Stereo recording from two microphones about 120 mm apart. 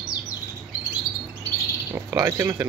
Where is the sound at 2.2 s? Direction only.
25° right (ahead or behind).